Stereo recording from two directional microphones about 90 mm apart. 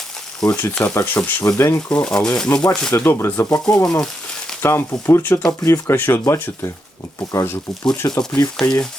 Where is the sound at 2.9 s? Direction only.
25° left (ahead or behind).